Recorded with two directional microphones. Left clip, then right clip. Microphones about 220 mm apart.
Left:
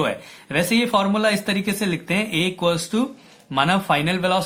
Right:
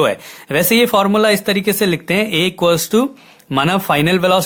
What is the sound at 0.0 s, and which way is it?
Speech, 50° right (ahead or behind).